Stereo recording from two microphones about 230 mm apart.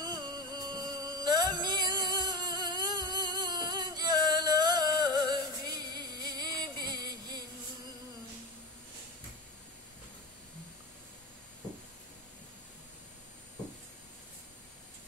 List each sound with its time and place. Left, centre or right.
0.0 s music: centre